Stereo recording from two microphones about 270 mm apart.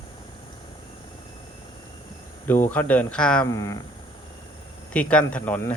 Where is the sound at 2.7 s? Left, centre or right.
Centre.